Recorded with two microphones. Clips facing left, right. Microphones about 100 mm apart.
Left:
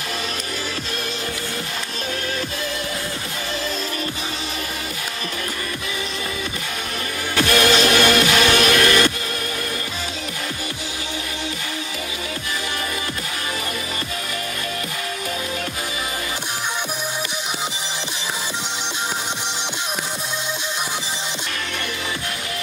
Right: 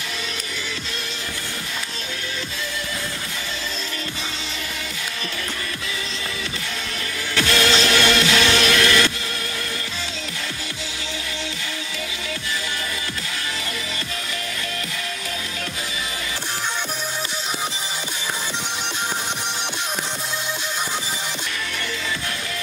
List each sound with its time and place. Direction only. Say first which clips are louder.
7.3 s music: left 3 dB; 50° left (ahead or behind)